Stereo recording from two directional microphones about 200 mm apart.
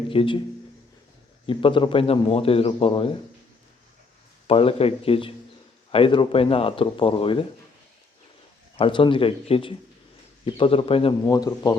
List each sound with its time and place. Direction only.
0.1 s a man's voice: 25° left (ahead or behind)
1.5 s a man's voice: 25° left (ahead or behind)
4.4 s a man's voice: 30° left (ahead or behind)
8.7 s a man's voice: 25° left (ahead or behind)